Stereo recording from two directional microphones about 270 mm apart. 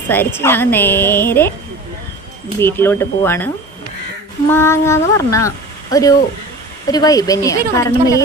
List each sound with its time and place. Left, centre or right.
0.1 s speech: centre
2.6 s speech: centre